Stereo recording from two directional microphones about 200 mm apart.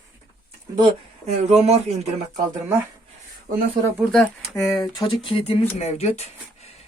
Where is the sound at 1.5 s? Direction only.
30° right (ahead or behind).